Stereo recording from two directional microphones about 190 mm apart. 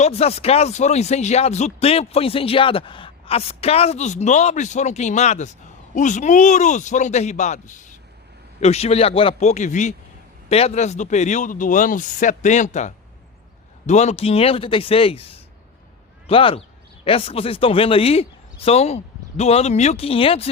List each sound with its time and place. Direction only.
0.0 s speech: 35° left (ahead or behind)